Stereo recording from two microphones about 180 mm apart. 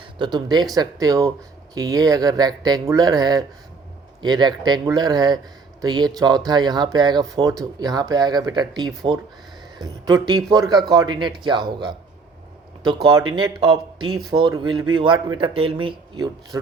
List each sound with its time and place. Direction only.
0.0 s speech: 25° right (ahead or behind)